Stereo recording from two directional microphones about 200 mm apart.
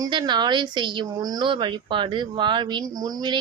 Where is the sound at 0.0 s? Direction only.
20° right (ahead or behind).